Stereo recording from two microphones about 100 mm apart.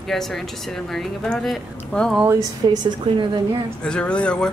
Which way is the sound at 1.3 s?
10° left (ahead or behind).